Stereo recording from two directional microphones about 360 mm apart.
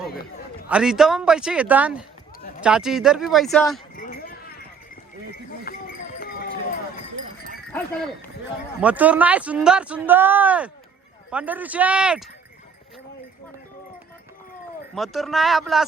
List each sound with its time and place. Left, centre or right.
0.7 s speech: centre
4.0 s clip-clop: left
5.7 s clip-clop: left
8.8 s speech: centre
14.9 s speech: centre